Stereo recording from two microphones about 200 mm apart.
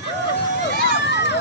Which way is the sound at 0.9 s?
60° left (ahead or behind).